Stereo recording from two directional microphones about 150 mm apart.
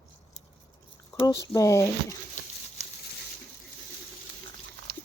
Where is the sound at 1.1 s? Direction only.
20° left (ahead or behind).